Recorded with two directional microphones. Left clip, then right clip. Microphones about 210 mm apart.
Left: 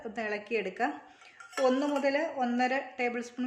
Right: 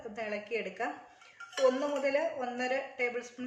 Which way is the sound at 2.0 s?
50° left (ahead or behind).